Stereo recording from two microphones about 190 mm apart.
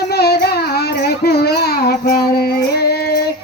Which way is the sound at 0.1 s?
60° left (ahead or behind).